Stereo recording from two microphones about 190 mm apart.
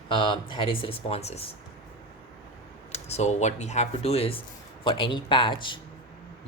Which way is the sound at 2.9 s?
35° left (ahead or behind).